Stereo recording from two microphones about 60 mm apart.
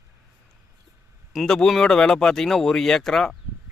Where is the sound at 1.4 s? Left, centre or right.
Centre.